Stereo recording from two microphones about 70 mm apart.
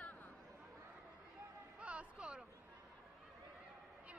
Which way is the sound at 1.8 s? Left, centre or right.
Centre.